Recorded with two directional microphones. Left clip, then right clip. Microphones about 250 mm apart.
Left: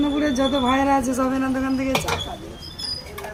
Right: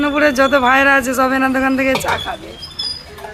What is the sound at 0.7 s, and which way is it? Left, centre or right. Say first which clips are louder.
Speech: right 8 dB; centre.